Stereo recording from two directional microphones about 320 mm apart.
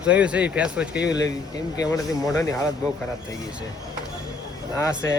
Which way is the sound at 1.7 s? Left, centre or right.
Centre.